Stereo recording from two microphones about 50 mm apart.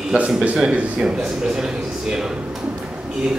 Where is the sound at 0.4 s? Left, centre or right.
Centre.